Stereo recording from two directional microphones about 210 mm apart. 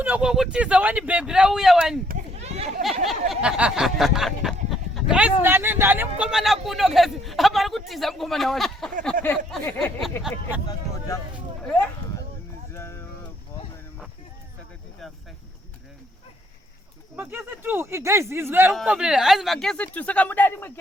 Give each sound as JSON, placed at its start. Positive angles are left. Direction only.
{"t": 0.0, "sound": "speech", "side_deg": -5}
{"t": 2.0, "sound": "a sound", "side_deg": -30}
{"t": 2.8, "sound": "speech", "side_deg": 0}
{"t": 11.6, "sound": "speech", "side_deg": 5}
{"t": 12.7, "sound": "a sound", "side_deg": 15}
{"t": 17.2, "sound": "speech", "side_deg": -10}